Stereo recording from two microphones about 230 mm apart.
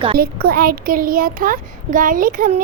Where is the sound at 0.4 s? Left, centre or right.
Right.